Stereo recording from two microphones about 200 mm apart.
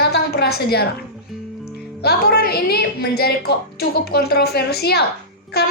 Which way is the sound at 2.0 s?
50° left (ahead or behind).